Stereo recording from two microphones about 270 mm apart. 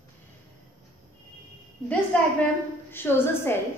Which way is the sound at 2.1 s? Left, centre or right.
Centre.